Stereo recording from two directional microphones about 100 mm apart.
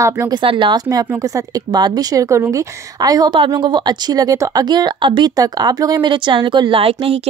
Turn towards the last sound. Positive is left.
turn(degrees=-75)  # may be behind; listen again after turning